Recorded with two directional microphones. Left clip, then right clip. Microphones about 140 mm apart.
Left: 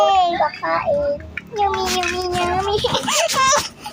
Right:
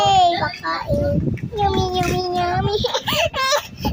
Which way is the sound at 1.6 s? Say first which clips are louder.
Left 1 dB; 10° right (ahead or behind).